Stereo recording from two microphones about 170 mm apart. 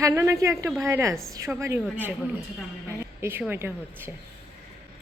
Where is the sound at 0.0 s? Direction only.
15° right (ahead or behind).